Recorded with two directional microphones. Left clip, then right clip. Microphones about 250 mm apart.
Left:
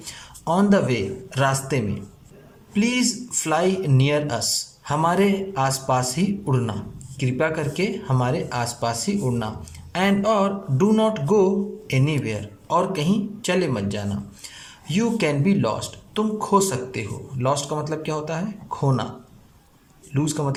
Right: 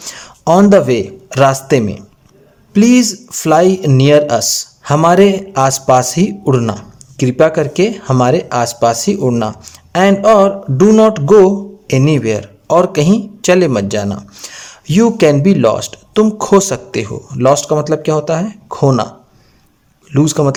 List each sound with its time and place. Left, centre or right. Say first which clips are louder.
0.0 s a man's voice: right 13 dB; right
20.1 s speech: right 13 dB; right